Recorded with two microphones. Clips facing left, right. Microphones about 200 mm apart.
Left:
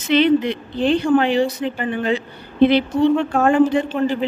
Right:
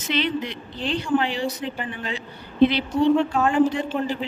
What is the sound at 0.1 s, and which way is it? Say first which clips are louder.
Speech: left 10 dB; 60° left (ahead or behind).